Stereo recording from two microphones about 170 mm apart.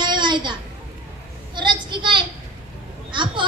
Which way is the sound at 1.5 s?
25° right (ahead or behind).